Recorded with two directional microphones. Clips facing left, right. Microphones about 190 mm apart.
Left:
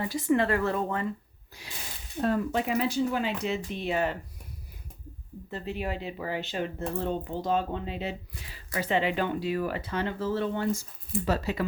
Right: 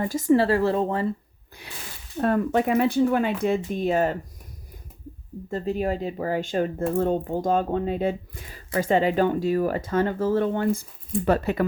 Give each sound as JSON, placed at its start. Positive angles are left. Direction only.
{"t": 0.0, "sound": "a woman's voice", "side_deg": -45}
{"t": 1.6, "sound": "speech", "side_deg": -60}
{"t": 5.5, "sound": "speech", "side_deg": -45}